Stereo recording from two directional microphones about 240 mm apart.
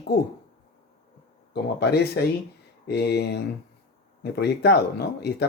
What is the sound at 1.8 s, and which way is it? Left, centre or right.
Speech, left.